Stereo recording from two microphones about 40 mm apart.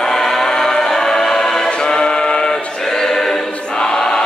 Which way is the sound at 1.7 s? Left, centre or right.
Left.